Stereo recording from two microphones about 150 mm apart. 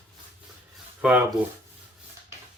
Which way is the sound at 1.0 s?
10° right (ahead or behind).